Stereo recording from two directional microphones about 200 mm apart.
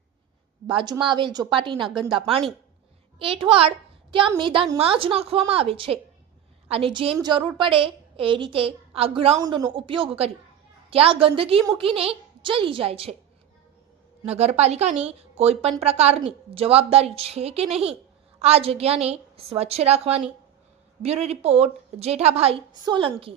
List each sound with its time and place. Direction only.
0.7 s a woman's voice: 25° right (ahead or behind)
14.3 s a woman's voice: 35° right (ahead or behind)